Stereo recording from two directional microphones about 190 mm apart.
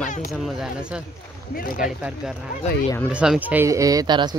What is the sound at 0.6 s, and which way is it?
Speech, 5° right (ahead or behind).